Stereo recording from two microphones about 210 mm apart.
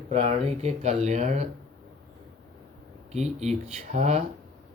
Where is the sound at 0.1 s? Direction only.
30° right (ahead or behind).